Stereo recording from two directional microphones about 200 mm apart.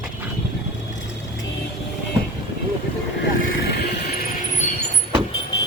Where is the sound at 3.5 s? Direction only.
55° left (ahead or behind).